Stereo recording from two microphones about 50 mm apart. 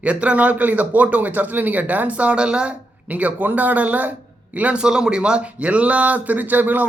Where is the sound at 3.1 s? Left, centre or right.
Right.